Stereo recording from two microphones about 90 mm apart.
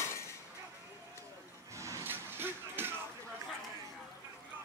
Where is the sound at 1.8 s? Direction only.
35° right (ahead or behind).